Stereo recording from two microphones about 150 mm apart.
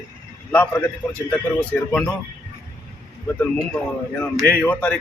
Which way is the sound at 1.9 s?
5° left (ahead or behind).